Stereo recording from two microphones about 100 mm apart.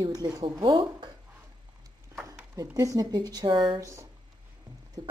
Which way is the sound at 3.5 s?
55° right (ahead or behind).